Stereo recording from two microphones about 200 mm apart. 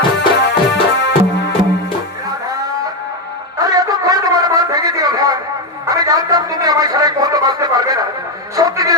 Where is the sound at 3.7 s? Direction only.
20° right (ahead or behind).